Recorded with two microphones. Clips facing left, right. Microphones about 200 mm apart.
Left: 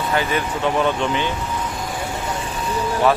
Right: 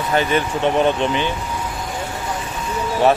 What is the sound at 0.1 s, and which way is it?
Speech, 20° right (ahead or behind).